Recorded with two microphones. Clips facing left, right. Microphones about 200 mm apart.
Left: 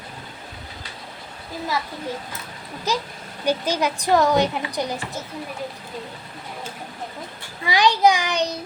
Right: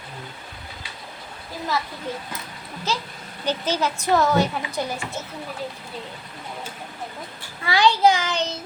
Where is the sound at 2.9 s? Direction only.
15° left (ahead or behind).